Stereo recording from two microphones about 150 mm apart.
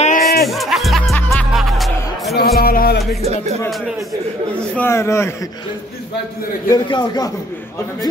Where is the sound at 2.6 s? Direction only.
85° left.